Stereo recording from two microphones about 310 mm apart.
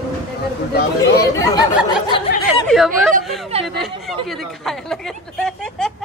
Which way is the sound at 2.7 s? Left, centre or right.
Centre.